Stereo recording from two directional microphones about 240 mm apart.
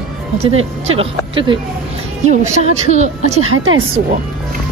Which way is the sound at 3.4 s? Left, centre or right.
Right.